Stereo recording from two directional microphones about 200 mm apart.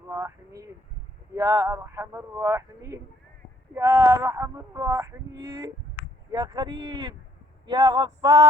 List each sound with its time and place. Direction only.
0.1 s speech: 15° right (ahead or behind)